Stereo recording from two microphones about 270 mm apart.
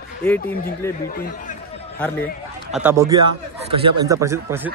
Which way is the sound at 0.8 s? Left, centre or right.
Centre.